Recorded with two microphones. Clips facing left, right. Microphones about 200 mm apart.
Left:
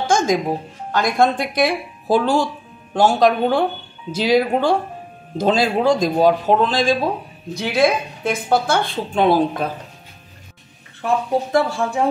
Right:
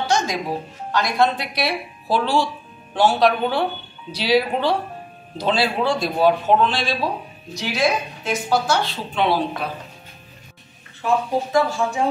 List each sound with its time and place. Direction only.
0.0 s music: 50° left (ahead or behind)
0.9 s speech: 50° left (ahead or behind)
7.5 s speech: 55° left (ahead or behind)
11.5 s speech: 55° left (ahead or behind)